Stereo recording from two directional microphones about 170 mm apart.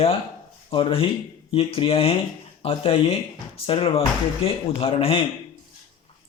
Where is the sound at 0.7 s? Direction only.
30° left (ahead or behind).